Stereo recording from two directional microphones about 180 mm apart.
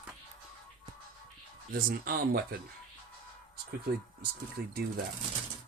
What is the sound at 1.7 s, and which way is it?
Speech, 55° right (ahead or behind).